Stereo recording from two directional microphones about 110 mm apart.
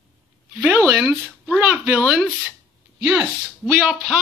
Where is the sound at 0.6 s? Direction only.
10° right (ahead or behind).